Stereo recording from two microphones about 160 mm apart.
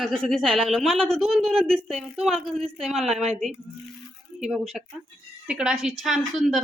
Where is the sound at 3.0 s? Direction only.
40° right (ahead or behind).